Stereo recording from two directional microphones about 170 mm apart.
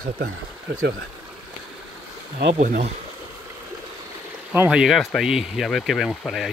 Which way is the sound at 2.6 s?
45° right (ahead or behind).